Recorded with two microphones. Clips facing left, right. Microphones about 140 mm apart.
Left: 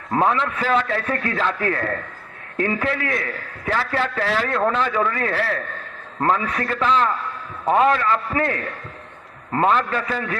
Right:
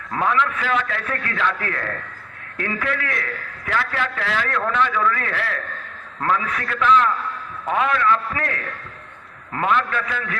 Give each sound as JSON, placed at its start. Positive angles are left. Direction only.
{"t": 0.1, "sound": "a man's voice", "side_deg": 35}